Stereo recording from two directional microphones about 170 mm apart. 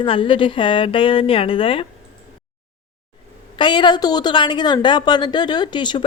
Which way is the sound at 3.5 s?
30° left (ahead or behind).